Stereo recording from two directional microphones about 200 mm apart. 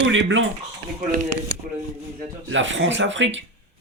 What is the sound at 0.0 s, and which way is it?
Speech, 60° right (ahead or behind).